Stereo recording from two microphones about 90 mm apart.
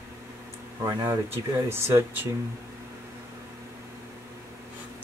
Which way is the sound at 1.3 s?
25° right (ahead or behind).